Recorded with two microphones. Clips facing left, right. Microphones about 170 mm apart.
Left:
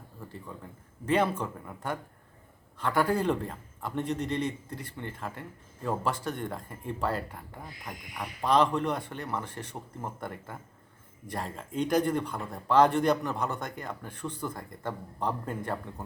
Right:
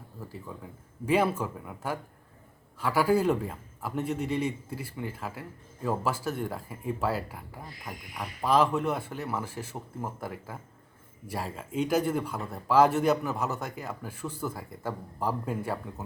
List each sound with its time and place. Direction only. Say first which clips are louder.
0.2 s a man's voice: right 2 dB; 5° right (ahead or behind)